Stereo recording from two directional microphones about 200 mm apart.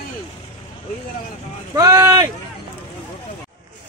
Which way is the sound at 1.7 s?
15° right (ahead or behind).